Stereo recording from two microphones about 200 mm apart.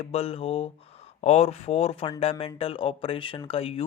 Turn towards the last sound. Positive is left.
turn(degrees=30)  # may be behind; listen again after turning